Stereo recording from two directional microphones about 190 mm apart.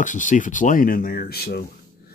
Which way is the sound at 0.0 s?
40° left (ahead or behind).